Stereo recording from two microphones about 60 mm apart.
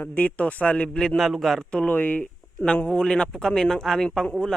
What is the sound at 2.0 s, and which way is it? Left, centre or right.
Speech, left.